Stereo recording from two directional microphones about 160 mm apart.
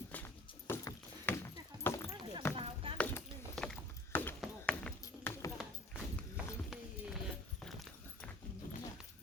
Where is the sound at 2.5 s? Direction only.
35° right (ahead or behind).